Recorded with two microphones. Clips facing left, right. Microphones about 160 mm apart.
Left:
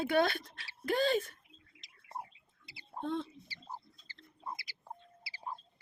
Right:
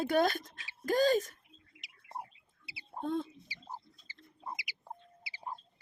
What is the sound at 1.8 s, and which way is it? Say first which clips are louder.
Rodents: even; 10° right (ahead or behind).